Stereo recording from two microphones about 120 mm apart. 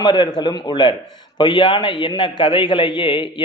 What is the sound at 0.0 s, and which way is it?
A man's voice, 40° left (ahead or behind).